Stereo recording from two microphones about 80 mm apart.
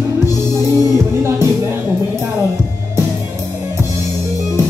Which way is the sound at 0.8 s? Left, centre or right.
Right.